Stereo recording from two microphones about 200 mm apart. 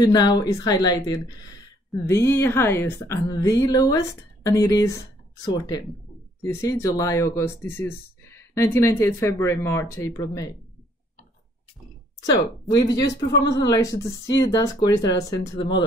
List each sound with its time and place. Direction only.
0.0 s speech: 20° left (ahead or behind)
12.6 s speech: 20° left (ahead or behind)